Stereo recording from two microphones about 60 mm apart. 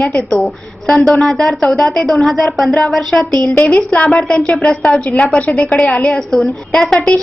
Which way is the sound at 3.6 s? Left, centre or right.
Left.